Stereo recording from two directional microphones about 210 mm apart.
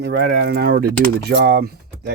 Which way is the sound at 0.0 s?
50° right (ahead or behind).